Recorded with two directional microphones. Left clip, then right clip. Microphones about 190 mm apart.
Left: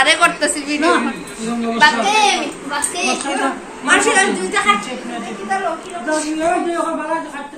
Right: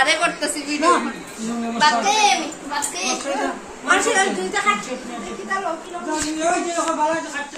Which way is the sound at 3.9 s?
20° right (ahead or behind).